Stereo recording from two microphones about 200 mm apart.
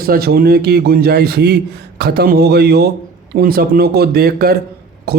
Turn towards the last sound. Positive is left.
turn(degrees=-50)  # may be behind; listen again after turning